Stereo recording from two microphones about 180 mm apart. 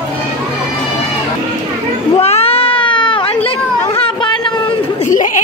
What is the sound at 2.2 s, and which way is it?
Cat, 35° left (ahead or behind).